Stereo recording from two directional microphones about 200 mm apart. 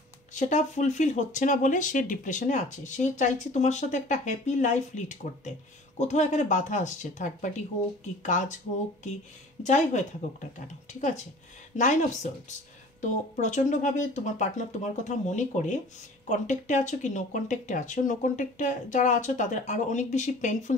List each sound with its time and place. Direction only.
0.3 s speech: 35° left (ahead or behind)
9.6 s speech: 35° left (ahead or behind)